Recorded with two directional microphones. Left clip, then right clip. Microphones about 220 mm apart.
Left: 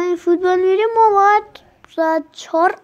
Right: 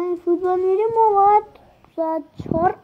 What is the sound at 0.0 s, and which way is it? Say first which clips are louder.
A child's voice: left 4 dB; 25° left (ahead or behind).